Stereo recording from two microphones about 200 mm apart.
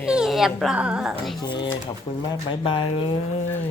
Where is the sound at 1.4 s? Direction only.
20° left (ahead or behind).